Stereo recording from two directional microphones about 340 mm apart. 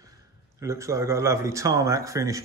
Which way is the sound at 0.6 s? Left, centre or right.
Centre.